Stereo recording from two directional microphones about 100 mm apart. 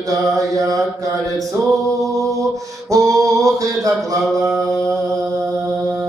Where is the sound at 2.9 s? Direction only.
35° right (ahead or behind).